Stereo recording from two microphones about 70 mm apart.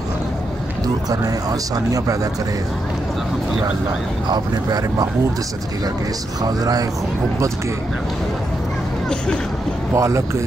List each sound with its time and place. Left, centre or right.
1.2 s speech: right
4.3 s speech: right
6.4 s speech: right
9.9 s speech: right